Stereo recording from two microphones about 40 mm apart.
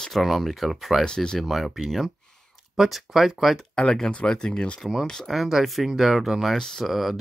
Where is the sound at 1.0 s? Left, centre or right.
Centre.